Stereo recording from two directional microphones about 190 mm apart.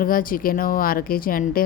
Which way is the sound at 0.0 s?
45° left (ahead or behind).